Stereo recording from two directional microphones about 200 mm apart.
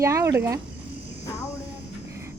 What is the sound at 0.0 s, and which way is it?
Speech, 15° right (ahead or behind).